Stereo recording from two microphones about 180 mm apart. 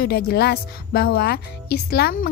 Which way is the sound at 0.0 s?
60° left (ahead or behind).